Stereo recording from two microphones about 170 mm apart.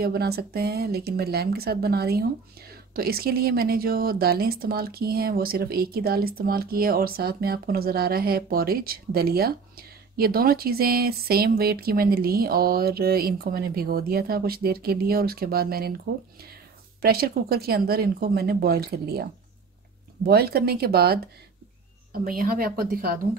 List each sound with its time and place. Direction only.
0.0 s speech: 65° right (ahead or behind)
17.0 s speech: 65° right (ahead or behind)
20.2 s speech: 65° right (ahead or behind)